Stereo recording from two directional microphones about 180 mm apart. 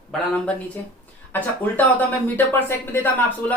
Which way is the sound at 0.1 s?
5° left (ahead or behind).